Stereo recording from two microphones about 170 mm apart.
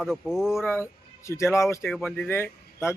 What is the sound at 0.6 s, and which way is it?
Speech, 15° left (ahead or behind).